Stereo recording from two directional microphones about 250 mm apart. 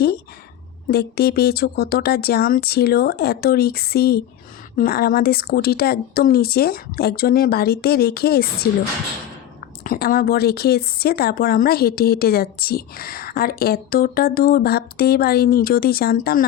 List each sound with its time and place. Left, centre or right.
0.9 s speech: left
9.8 s speech: left